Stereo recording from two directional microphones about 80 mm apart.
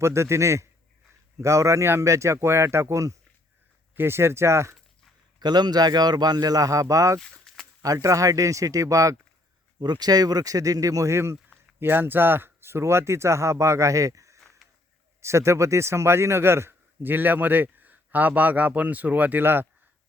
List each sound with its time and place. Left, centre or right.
0.0 s speech: right
3.9 s speech: right
5.4 s a man's voice: right
7.2 s a sound: centre
8.0 s speech: right
9.8 s a man's voice: right